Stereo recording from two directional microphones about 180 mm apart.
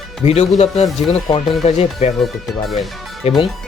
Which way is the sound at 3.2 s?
35° left (ahead or behind).